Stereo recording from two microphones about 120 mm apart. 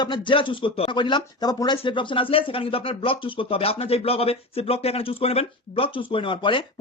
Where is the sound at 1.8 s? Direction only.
45° left (ahead or behind).